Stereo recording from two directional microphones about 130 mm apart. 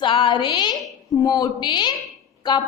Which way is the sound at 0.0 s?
40° left (ahead or behind).